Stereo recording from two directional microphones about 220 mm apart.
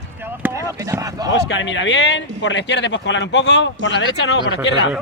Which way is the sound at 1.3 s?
55° left (ahead or behind).